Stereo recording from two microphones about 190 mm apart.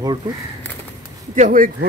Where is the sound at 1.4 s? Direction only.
45° right (ahead or behind).